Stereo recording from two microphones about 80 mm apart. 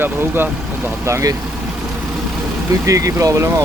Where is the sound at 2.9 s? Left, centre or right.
Right.